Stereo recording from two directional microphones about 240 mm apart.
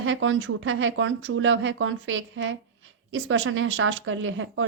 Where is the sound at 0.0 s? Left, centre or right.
Right.